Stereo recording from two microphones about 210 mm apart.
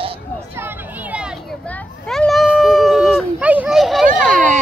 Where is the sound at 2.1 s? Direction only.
Centre (ahead or behind).